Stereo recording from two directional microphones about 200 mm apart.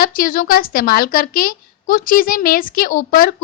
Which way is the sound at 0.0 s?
45° left (ahead or behind).